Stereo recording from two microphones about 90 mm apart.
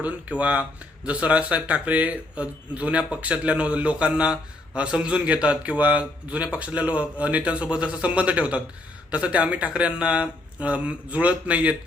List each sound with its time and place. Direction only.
0.0 s speech: 15° right (ahead or behind)